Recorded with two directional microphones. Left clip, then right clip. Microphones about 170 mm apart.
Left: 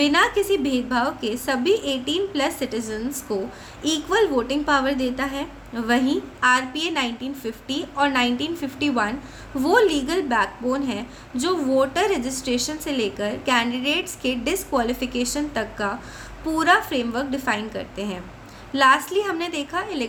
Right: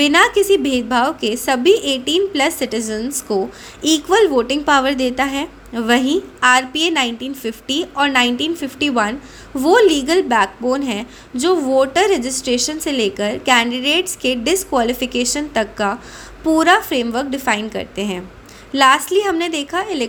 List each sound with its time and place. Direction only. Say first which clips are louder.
0.0 s a woman's voice: right 6 dB; 40° right (ahead or behind)